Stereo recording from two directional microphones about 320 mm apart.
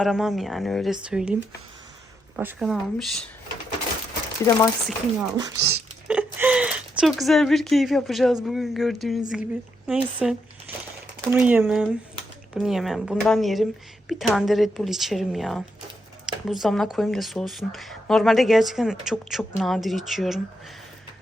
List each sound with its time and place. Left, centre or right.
0.0 s speech: centre
4.4 s speech: centre
5.4 s speech: centre